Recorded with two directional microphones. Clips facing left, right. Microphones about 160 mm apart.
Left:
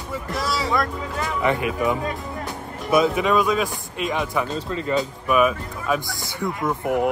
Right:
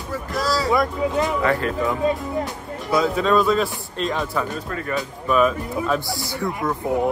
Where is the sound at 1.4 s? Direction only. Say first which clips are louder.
Even; 15° left (ahead or behind).